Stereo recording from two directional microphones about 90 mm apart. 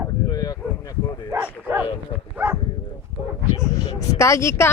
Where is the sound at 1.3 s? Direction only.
20° right (ahead or behind).